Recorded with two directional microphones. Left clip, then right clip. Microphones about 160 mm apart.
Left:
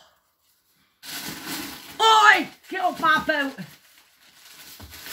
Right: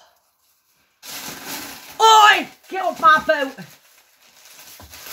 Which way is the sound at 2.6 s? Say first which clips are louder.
Right 9 dB; 50° right (ahead or behind).